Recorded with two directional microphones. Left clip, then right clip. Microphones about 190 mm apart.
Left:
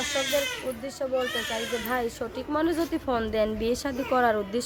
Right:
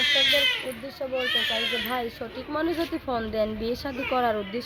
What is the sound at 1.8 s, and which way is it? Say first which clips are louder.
A woman's voice: left 1 dB; 10° left (ahead or behind).